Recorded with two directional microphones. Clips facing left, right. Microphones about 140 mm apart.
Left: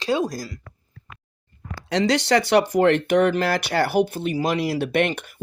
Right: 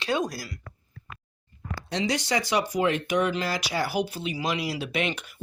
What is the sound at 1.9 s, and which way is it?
Speech, 85° left.